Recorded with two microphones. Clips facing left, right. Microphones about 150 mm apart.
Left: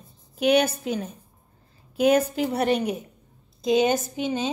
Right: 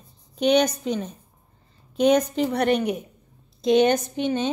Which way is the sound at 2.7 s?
35° left (ahead or behind).